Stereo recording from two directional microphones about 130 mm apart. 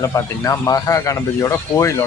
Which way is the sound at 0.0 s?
25° left (ahead or behind).